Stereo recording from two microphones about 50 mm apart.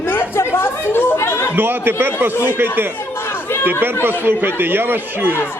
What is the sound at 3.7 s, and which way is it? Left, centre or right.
A man's voice, right.